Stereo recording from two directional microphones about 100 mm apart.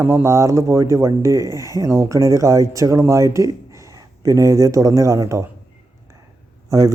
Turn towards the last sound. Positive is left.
turn(degrees=-30)  # may be behind; listen again after turning